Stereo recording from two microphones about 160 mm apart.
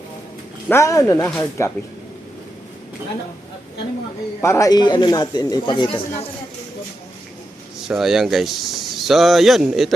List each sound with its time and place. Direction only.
0.7 s speech: 20° left (ahead or behind)
4.4 s speech: 15° left (ahead or behind)
7.8 s speech: centre (ahead or behind)